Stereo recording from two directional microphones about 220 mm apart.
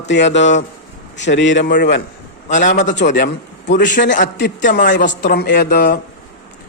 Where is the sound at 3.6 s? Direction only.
55° left (ahead or behind).